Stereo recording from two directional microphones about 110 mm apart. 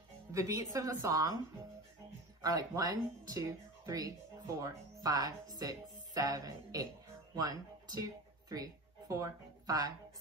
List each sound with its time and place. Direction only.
0.3 s speech: 30° right (ahead or behind)
2.4 s speech: 35° right (ahead or behind)